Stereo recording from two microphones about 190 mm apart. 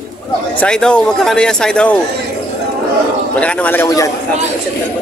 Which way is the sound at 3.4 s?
5° left (ahead or behind).